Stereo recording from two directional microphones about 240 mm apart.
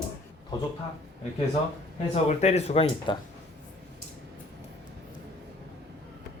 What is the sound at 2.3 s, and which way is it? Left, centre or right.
Speech, left.